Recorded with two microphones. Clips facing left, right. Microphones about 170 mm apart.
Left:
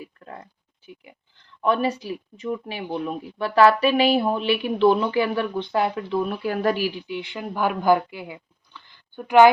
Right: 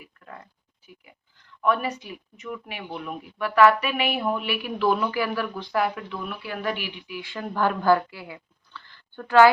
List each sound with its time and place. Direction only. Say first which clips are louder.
0.0 s a sound: left 5 dB; 30° left (ahead or behind)
0.9 s speech: left 6 dB; 30° left (ahead or behind)
7.2 s speech: right 1 dB; 20° left (ahead or behind)